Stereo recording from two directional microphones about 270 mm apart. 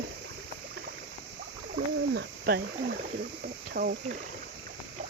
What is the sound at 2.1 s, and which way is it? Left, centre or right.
Speech, right.